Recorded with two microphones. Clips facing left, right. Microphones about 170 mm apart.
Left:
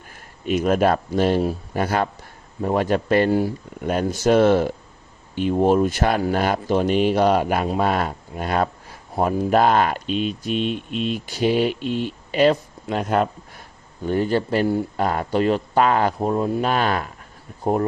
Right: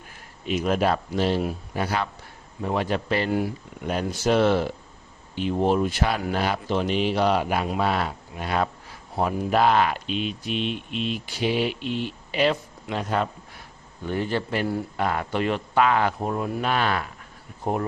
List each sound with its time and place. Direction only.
0.4 s speech: 50° left (ahead or behind)
16.3 s speech: 30° left (ahead or behind)